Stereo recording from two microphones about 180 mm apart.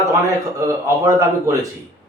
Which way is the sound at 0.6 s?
20° right (ahead or behind).